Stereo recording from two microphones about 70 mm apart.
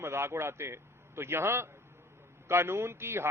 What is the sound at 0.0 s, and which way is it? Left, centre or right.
A man's voice, right.